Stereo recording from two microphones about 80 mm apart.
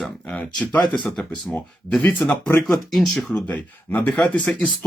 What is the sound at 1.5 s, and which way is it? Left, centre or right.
Speech, centre.